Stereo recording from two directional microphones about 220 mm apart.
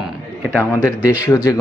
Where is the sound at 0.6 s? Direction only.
10° left (ahead or behind).